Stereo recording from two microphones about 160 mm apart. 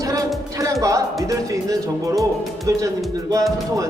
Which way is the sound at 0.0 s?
20° right (ahead or behind).